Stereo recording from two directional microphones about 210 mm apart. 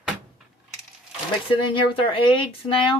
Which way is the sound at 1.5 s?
25° left (ahead or behind).